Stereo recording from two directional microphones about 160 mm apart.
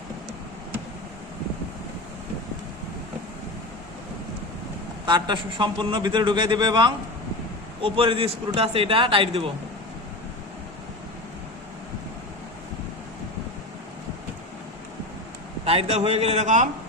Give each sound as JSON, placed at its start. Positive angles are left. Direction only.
{"t": 5.0, "sound": "a man's voice", "side_deg": -30}
{"t": 15.6, "sound": "a man's voice", "side_deg": -40}